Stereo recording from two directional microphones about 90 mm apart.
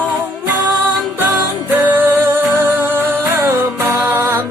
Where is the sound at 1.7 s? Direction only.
20° right (ahead or behind).